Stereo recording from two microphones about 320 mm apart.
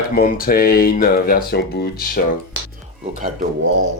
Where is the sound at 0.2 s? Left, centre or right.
Left.